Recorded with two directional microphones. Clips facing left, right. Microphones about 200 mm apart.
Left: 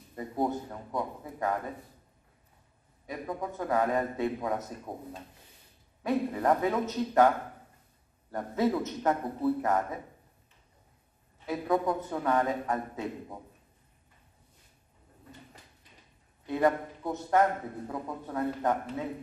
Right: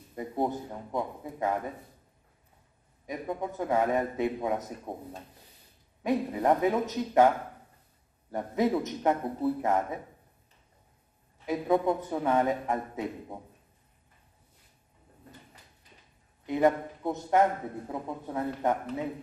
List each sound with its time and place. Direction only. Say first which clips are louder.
0.1 s a man's voice: even; 15° right (ahead or behind)
3.1 s a man's voice: right 2 dB; 20° right (ahead or behind)
6.0 s a man's voice: right 1 dB; 20° right (ahead or behind)
8.3 s a man's voice: right 1 dB; 20° right (ahead or behind)
11.4 s a man's voice: right 2 dB; 20° right (ahead or behind)
16.4 s a man's voice: right 2 dB; 20° right (ahead or behind)